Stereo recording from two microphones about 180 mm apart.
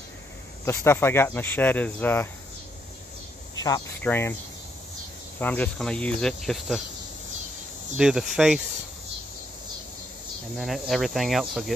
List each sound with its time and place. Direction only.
0.7 s speech: 15° left (ahead or behind)
3.5 s cricket: 20° left (ahead or behind)
4.0 s speech: 10° left (ahead or behind)
5.4 s speech: 10° left (ahead or behind)
8.0 s speech: 5° right (ahead or behind)
10.5 s speech: centre (ahead or behind)